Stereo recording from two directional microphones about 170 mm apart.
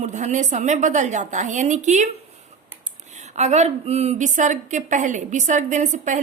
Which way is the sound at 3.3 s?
40° right (ahead or behind).